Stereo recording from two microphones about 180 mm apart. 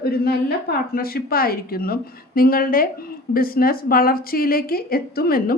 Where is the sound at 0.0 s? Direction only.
60° left (ahead or behind).